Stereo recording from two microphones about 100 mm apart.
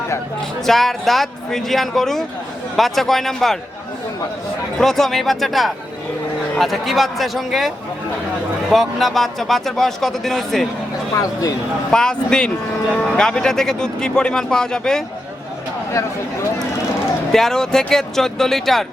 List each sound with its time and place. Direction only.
0.6 s speech: 5° left (ahead or behind)
4.8 s speech: 5° left (ahead or behind)
8.7 s speech: centre (ahead or behind)
11.1 s speech: 35° left (ahead or behind)
11.9 s speech: 10° left (ahead or behind)
17.3 s speech: 5° left (ahead or behind)